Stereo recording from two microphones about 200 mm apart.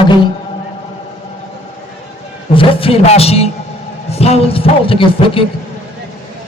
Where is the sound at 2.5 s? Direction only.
25° left (ahead or behind).